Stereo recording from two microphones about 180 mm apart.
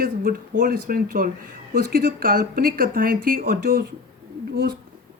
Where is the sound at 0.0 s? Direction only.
50° right (ahead or behind).